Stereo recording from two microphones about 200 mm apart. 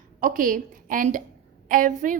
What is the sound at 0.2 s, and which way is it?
A woman's voice, 40° right (ahead or behind).